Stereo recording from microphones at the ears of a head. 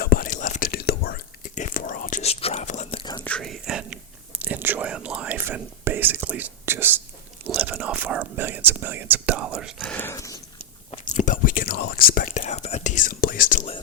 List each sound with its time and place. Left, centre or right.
0.0 s whispering: left
3.3 s whispering: right
11.0 s whispering: left